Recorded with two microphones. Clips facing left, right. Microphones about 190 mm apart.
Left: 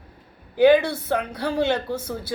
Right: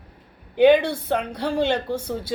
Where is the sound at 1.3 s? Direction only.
10° left (ahead or behind).